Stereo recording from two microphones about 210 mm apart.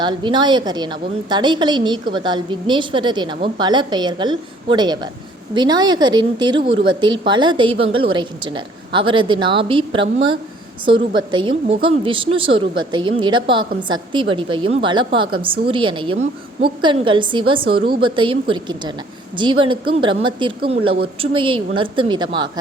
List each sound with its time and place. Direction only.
0.0 s a woman's voice: 20° right (ahead or behind)